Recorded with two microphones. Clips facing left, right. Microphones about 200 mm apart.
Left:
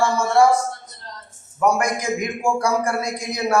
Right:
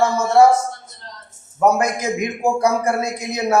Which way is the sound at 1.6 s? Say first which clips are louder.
Right 3 dB; 20° right (ahead or behind).